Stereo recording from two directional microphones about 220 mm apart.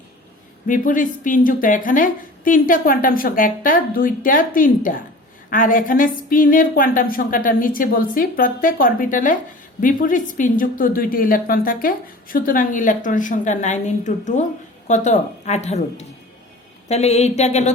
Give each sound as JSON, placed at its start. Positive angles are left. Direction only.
{"t": 0.7, "sound": "a woman's voice", "side_deg": 35}